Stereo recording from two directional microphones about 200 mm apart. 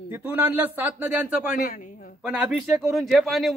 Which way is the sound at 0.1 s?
10° right (ahead or behind).